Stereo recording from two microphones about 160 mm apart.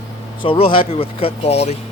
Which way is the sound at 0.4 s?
35° left (ahead or behind).